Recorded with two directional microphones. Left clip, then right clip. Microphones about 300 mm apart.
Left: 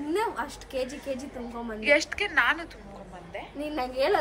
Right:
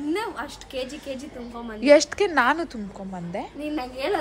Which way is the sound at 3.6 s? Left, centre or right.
Centre.